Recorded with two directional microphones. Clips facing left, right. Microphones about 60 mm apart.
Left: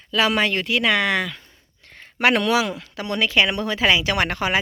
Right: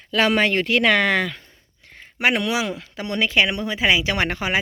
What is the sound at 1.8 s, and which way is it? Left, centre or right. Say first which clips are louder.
Speech: left 2 dB; centre.